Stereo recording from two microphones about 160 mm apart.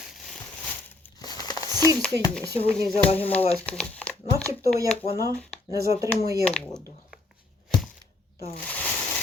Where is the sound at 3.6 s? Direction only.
5° left (ahead or behind).